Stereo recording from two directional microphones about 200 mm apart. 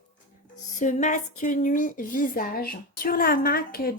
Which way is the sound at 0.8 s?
40° left (ahead or behind).